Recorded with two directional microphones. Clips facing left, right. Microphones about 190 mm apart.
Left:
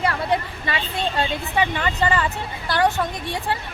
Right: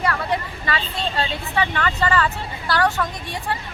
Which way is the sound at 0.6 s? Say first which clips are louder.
Even; 20° left (ahead or behind).